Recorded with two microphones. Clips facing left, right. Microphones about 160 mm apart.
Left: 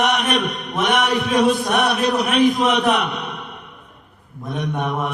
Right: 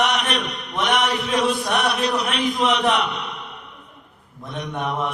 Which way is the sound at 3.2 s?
50° left (ahead or behind).